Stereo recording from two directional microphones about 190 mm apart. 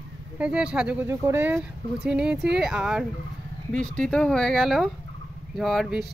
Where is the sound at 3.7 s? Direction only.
45° right (ahead or behind).